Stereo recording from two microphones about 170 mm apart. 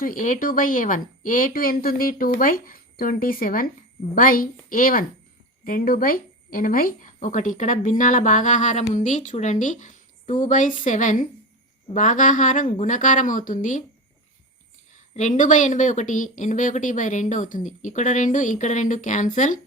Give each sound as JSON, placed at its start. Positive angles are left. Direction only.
{"t": 0.0, "sound": "a woman's voice", "side_deg": 50}
{"t": 15.1, "sound": "a woman's voice", "side_deg": 45}